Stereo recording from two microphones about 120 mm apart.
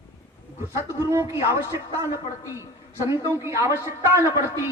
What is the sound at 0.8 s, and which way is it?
A man's voice, 20° right (ahead or behind).